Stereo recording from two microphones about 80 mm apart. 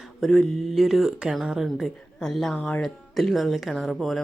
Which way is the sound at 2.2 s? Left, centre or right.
Centre.